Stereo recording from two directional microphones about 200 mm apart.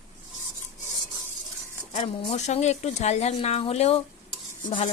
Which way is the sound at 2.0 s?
35° left (ahead or behind).